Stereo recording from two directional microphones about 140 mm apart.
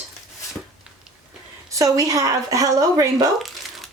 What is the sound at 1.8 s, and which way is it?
Speech, 25° right (ahead or behind).